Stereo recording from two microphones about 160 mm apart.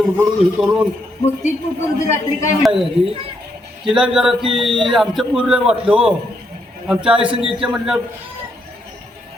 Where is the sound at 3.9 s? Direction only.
5° right (ahead or behind).